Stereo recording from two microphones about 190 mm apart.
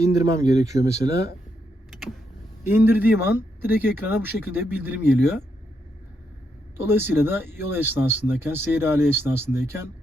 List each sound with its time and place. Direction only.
0.0 s speech: 15° right (ahead or behind)
2.6 s speech: 10° right (ahead or behind)
6.7 s speech: 10° right (ahead or behind)